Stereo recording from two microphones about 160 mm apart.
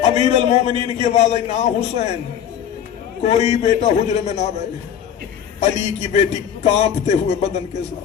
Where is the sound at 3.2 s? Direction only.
45° left (ahead or behind).